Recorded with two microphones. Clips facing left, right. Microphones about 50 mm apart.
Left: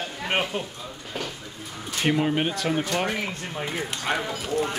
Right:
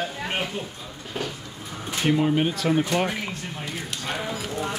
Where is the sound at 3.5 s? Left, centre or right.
Left.